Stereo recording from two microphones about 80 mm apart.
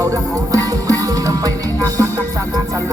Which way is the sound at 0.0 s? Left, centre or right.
Right.